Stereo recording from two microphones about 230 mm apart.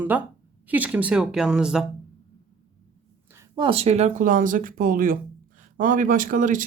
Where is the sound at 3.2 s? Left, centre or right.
Centre.